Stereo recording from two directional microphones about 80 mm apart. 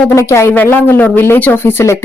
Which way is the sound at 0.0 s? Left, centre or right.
Left.